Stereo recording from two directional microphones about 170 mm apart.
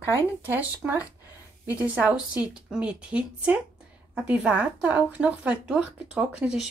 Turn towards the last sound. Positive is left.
turn(degrees=-5)  # may be behind; listen again after turning